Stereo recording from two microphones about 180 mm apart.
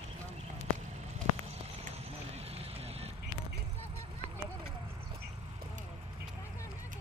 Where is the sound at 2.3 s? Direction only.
35° right (ahead or behind).